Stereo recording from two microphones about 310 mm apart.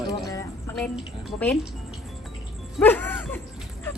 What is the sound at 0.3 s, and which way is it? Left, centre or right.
Music, centre.